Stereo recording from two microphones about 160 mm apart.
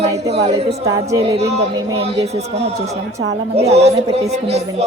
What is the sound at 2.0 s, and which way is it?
A man's voice, 40° right (ahead or behind).